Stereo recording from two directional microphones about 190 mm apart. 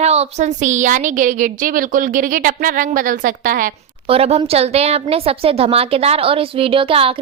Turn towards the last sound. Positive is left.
turn(degrees=-30)  # may be behind; listen again after turning